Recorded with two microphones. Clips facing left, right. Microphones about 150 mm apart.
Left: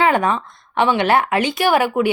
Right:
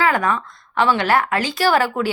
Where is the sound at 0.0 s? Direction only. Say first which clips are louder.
Left 2 dB; 25° left (ahead or behind).